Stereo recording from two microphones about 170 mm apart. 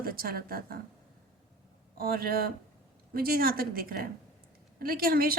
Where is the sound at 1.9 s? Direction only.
60° right (ahead or behind).